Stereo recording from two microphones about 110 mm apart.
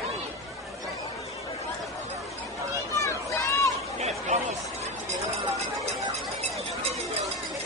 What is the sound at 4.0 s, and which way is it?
Chatter, 90° right.